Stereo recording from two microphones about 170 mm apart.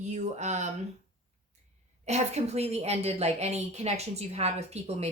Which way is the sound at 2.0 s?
40° right (ahead or behind).